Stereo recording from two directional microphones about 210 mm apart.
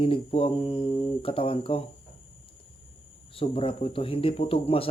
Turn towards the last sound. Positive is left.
turn(degrees=25)  # may be behind; listen again after turning